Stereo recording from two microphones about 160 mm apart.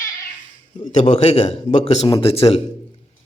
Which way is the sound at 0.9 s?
40° left (ahead or behind).